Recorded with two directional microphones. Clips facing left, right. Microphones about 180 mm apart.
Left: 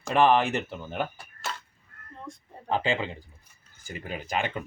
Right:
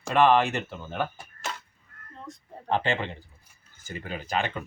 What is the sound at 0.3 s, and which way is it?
Speech, 15° left (ahead or behind).